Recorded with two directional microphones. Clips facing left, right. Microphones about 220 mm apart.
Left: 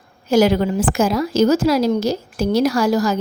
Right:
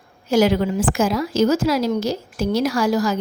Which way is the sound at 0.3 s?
40° left (ahead or behind).